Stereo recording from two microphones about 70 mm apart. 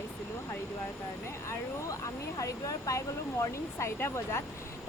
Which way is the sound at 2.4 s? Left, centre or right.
Left.